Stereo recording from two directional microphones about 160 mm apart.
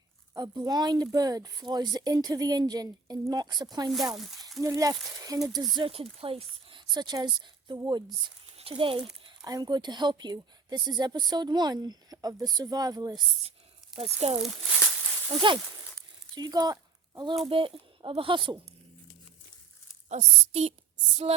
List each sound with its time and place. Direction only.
0.3 s speech: 25° right (ahead or behind)
4.2 s a sound: centre (ahead or behind)
4.6 s speech: 20° right (ahead or behind)
5.7 s a woman's voice: 35° right (ahead or behind)
9.2 s speech: 25° right (ahead or behind)
14.0 s speech: 40° right (ahead or behind)
14.4 s a sound: centre (ahead or behind)
16.3 s speech: 25° right (ahead or behind)
20.1 s a woman's voice: 45° right (ahead or behind)